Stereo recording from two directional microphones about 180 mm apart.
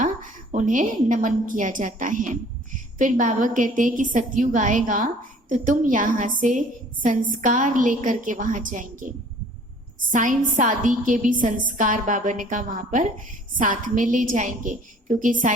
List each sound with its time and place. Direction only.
0.0 s a woman's voice: 45° right (ahead or behind)